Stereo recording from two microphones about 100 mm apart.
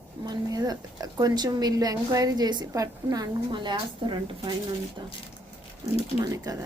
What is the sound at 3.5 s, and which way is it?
Speech, 50° right (ahead or behind).